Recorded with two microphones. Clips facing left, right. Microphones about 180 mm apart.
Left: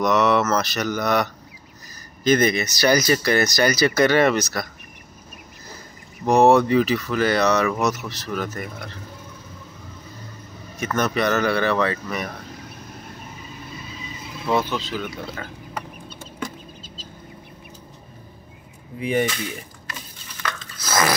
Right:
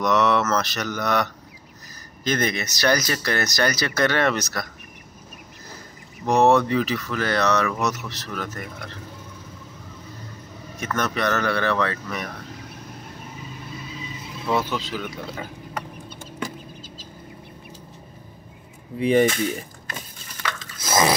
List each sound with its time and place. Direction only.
0.0 s mantra: 5° left (ahead or behind)
2.2 s speech: 5° left (ahead or behind)
6.2 s speech: 5° left (ahead or behind)
10.8 s speech: 10° left (ahead or behind)
14.5 s speech: 5° right (ahead or behind)
18.9 s speech: 30° right (ahead or behind)
19.2 s speech: 45° right (ahead or behind)
20.8 s dog: 20° right (ahead or behind)